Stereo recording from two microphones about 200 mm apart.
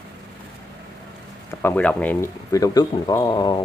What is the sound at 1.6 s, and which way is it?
Speech, 5° left (ahead or behind).